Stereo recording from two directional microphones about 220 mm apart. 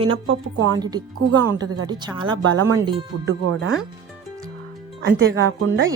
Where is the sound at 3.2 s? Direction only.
55° right (ahead or behind).